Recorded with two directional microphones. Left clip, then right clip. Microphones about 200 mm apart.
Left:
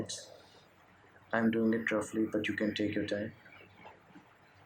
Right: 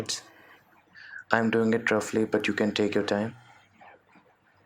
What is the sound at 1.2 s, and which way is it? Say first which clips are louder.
Speech: right 7 dB; 45° right (ahead or behind).